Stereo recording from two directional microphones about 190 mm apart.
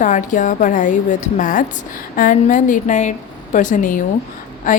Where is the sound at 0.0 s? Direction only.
40° left (ahead or behind).